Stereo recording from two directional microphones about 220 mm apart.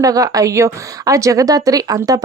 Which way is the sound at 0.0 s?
15° right (ahead or behind).